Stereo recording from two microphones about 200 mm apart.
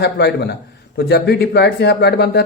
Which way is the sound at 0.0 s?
55° left (ahead or behind).